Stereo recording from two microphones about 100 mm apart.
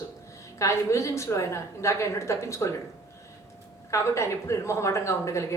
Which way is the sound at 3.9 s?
30° left (ahead or behind).